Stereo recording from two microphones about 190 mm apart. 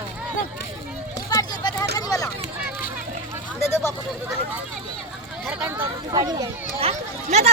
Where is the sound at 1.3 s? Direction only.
20° left (ahead or behind).